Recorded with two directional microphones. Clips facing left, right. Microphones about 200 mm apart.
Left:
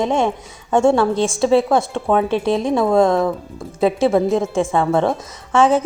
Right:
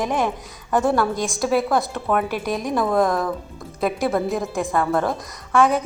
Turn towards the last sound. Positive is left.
turn(degrees=30)  # may be behind; listen again after turning